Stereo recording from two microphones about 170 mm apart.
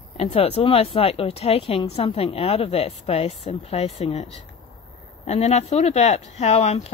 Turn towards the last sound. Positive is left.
turn(degrees=40)  # may be behind; listen again after turning